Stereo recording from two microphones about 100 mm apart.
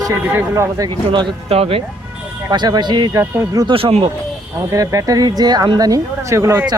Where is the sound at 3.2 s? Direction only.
25° right (ahead or behind).